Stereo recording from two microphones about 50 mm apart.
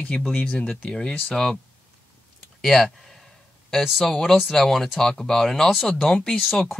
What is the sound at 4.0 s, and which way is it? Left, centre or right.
Speech, centre.